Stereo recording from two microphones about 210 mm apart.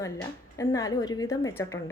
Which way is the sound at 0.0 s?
15° left (ahead or behind).